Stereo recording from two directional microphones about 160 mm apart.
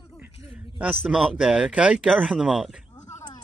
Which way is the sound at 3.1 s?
20° left (ahead or behind).